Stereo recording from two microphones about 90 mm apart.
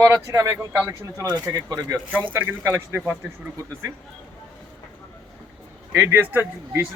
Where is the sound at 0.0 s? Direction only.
35° right (ahead or behind).